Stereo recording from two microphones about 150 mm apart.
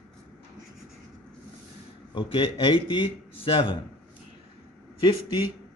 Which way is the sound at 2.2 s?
35° left (ahead or behind).